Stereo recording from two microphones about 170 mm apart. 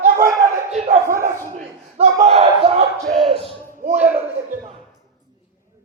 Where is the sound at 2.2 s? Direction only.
35° right (ahead or behind).